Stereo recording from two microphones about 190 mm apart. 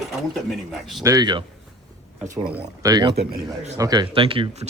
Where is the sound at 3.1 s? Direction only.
55° right (ahead or behind).